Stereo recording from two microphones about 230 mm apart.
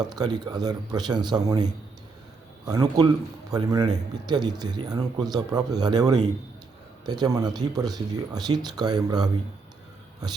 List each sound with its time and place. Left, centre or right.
0.1 s speech: centre